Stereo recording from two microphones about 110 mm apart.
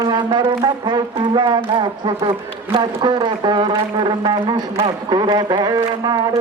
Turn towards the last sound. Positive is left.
turn(degrees=-40)  # may be behind; listen again after turning